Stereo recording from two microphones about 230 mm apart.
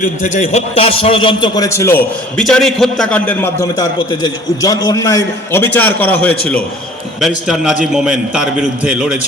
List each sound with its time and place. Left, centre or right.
0.0 s a man's voice: left; by 2.0 s centre
2.4 s a man's voice: centre